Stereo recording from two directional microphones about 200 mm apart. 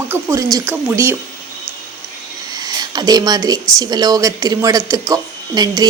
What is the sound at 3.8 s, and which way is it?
Speech, 20° right (ahead or behind).